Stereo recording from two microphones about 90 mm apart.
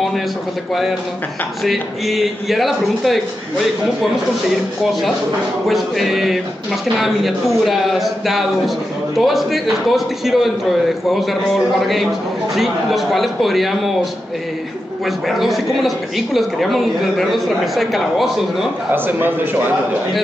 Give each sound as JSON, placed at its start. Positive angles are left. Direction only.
{"t": 1.6, "sound": "speech", "side_deg": 0}
{"t": 5.7, "sound": "speech", "side_deg": 0}
{"t": 15.0, "sound": "speech", "side_deg": 0}
{"t": 18.9, "sound": "a man's voice", "side_deg": -20}